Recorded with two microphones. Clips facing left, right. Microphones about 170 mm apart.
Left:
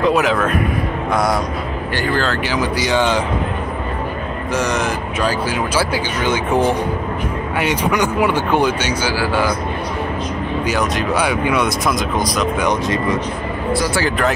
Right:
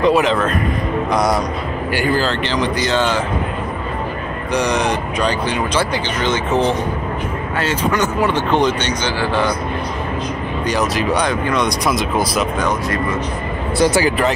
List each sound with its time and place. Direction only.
0.0 s speech: centre (ahead or behind)
2.4 s speech: 10° left (ahead or behind)
4.6 s speech: centre (ahead or behind)
10.7 s speech: centre (ahead or behind)
12.5 s speech: 20° left (ahead or behind)
13.8 s speech: 20° right (ahead or behind)